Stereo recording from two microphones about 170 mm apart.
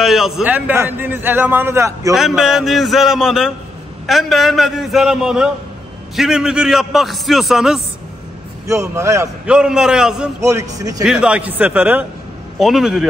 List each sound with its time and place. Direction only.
0.0 s a man's voice: centre (ahead or behind)
2.1 s a man's voice: centre (ahead or behind)
8.6 s a man's voice: 15° right (ahead or behind)
9.5 s a man's voice: 5° right (ahead or behind)
10.4 s speech: 20° right (ahead or behind)
11.1 s a man's voice: 5° right (ahead or behind)